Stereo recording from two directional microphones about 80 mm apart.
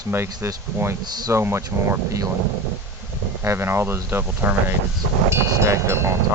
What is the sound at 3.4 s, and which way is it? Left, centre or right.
Speech, right.